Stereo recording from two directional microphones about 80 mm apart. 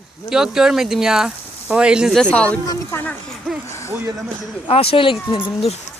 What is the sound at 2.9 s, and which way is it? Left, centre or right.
Speech, left.